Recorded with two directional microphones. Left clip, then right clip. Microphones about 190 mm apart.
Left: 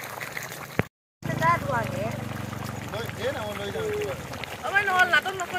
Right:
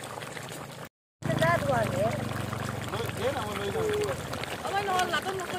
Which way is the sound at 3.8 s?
25° right (ahead or behind).